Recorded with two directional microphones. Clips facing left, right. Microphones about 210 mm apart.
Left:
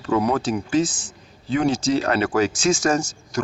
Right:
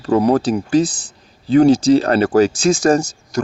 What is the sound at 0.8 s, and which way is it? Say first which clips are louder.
Speech: right 4 dB; 65° right (ahead or behind).